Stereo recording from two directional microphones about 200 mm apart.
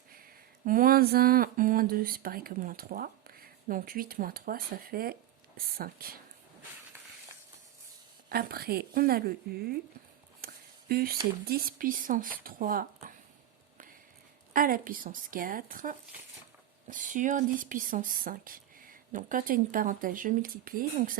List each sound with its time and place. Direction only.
0.6 s speech: 45° right (ahead or behind)
8.3 s speech: 50° right (ahead or behind)
10.4 s a sound: 50° right (ahead or behind)
11.4 s speech: 45° right (ahead or behind)
14.5 s speech: 45° right (ahead or behind)